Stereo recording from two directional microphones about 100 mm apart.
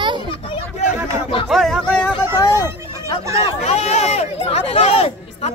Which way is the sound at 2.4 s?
35° left (ahead or behind).